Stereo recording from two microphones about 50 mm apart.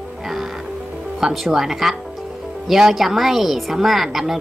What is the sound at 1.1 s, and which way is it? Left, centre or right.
Speech, centre.